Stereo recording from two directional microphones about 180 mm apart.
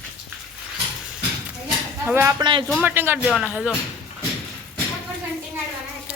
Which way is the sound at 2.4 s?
25° right (ahead or behind).